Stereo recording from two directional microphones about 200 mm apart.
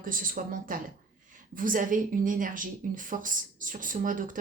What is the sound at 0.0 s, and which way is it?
A woman's voice, 45° right (ahead or behind).